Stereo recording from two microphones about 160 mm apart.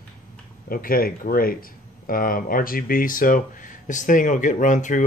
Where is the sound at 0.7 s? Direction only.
65° left (ahead or behind).